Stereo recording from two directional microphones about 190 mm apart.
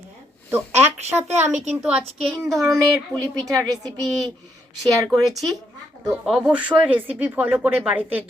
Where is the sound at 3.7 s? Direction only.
20° right (ahead or behind).